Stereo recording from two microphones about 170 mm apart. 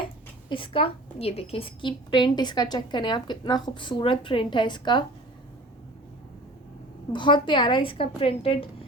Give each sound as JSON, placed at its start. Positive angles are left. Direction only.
{"t": 0.5, "sound": "a woman's voice", "side_deg": 30}
{"t": 7.1, "sound": "a woman's voice", "side_deg": 30}